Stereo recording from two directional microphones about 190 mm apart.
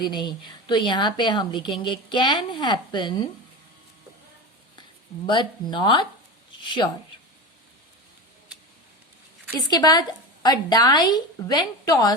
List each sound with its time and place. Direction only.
0.0 s a woman's voice: 25° left (ahead or behind)
4.8 s a woman's voice: 25° left (ahead or behind)
9.6 s a woman's voice: 20° left (ahead or behind)